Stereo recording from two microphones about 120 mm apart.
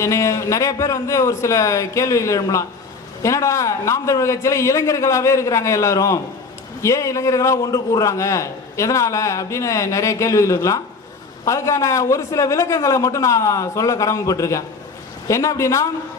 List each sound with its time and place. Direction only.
0.0 s a man's voice: 25° left (ahead or behind)